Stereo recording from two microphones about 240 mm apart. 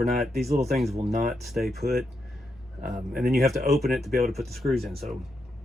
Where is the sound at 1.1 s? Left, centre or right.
Right.